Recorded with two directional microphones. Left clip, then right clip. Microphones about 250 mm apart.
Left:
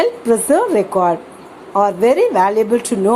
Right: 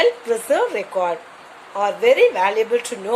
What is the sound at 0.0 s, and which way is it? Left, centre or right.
A woman's voice, centre.